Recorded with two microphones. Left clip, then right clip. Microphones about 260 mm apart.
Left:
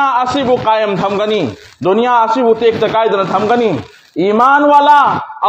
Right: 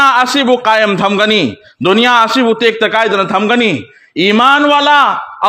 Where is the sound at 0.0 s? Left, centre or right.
Right.